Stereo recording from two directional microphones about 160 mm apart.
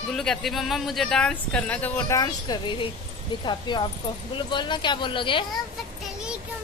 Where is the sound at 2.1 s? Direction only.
25° left (ahead or behind).